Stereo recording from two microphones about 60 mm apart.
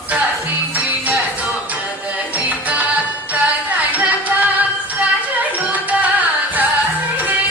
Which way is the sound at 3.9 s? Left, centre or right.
Right.